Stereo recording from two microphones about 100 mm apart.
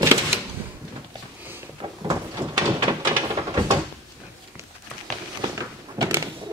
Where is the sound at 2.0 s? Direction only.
40° right (ahead or behind).